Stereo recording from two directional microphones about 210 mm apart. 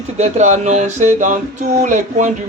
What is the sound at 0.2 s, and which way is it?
Speech, 35° right (ahead or behind).